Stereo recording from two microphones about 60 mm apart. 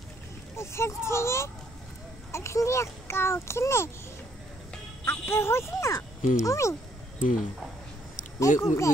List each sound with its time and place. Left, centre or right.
0.6 s a child's voice: left
5.0 s speech: left
5.9 s speech: left
8.4 s speech: left